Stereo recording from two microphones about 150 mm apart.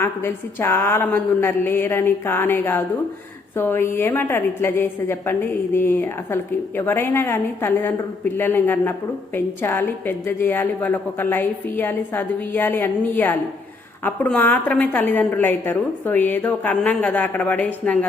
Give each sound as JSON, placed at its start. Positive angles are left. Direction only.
{"t": 0.0, "sound": "a woman's voice", "side_deg": 15}